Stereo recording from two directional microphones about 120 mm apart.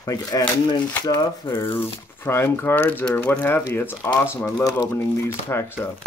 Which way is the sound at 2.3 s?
20° left (ahead or behind).